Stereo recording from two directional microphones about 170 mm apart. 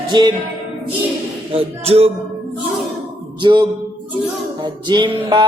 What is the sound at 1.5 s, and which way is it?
Music, 35° right (ahead or behind).